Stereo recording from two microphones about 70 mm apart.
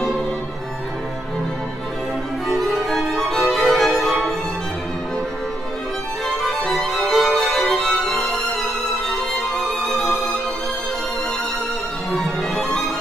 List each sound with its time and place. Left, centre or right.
2.4 s music: centre
6.2 s violin: centre
9.1 s music: centre
12.1 s music: centre